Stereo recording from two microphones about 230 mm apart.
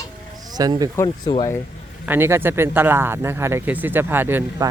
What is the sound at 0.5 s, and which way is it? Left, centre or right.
Speech, centre.